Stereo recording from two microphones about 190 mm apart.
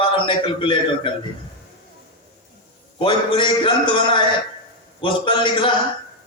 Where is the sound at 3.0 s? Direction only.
25° left (ahead or behind).